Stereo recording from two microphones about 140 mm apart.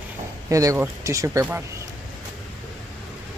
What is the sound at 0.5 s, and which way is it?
Speech, 20° right (ahead or behind).